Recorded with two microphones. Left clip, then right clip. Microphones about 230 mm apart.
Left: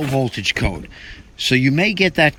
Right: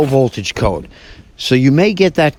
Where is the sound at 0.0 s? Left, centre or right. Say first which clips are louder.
Right 7 dB; right.